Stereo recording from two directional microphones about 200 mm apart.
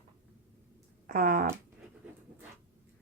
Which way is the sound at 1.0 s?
45° right (ahead or behind).